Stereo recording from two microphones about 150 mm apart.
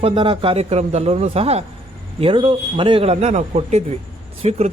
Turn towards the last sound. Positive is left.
turn(degrees=-45)  # may be behind; listen again after turning